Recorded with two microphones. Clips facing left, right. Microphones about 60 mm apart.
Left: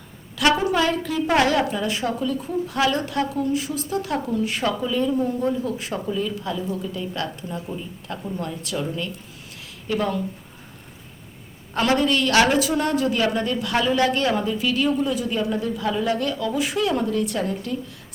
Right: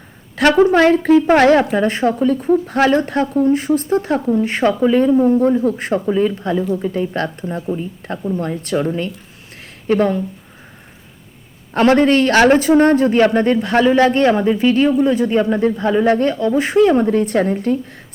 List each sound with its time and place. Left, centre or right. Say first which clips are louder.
0.3 s a woman's voice: right 8 dB; right
11.7 s a man's voice: right 8 dB; right